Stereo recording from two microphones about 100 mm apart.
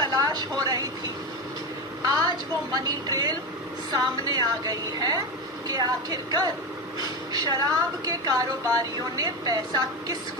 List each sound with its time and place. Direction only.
0.0 s vehicle: 40° right (ahead or behind)
2.0 s a sound: 35° right (ahead or behind)
2.7 s a woman's voice: 40° right (ahead or behind)